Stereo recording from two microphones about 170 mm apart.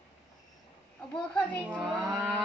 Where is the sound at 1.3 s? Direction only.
10° left (ahead or behind).